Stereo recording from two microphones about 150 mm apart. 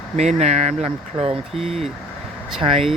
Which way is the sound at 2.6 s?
40° right (ahead or behind).